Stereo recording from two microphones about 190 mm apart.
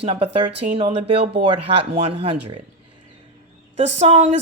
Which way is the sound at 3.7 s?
35° right (ahead or behind).